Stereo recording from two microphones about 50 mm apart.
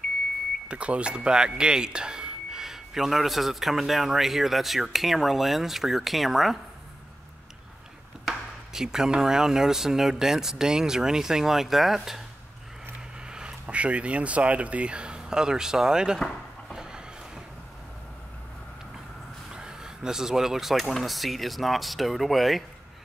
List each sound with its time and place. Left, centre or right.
0.7 s speech: right; by 6.6 s centre
8.3 s speech: centre
13.2 s speech: centre
16.7 s a sound: centre
19.5 s speech: centre